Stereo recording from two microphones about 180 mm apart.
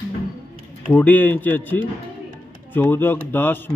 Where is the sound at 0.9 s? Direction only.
10° left (ahead or behind).